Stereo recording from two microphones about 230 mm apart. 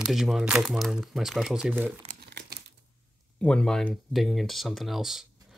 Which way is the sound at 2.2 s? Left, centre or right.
Right.